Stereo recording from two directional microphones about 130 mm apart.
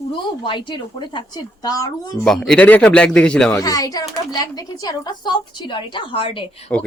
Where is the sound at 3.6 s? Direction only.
30° left (ahead or behind).